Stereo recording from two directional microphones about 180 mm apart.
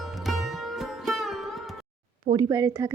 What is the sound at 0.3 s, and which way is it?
Sitar, centre (ahead or behind).